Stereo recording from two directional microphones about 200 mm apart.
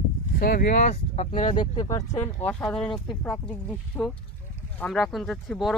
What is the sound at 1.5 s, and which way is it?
Speech, 20° left (ahead or behind).